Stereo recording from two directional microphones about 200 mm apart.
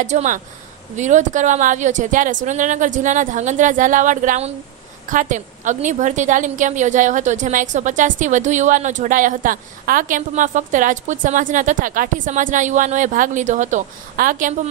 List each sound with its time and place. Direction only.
0.0 s a woman's voice: 35° right (ahead or behind)